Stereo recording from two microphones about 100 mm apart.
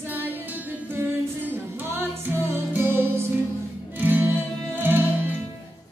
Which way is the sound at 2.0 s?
20° right (ahead or behind).